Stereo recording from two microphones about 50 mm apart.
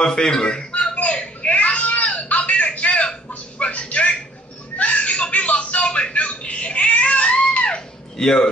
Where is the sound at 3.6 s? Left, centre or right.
Left.